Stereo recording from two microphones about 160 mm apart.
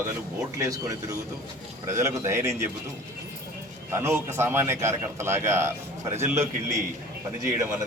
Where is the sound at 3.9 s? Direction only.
15° right (ahead or behind).